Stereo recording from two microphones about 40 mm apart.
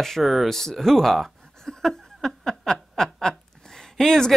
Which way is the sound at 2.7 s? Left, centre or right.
Centre.